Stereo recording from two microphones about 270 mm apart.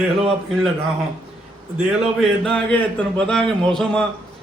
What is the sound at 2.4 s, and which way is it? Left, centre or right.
A man's voice, centre.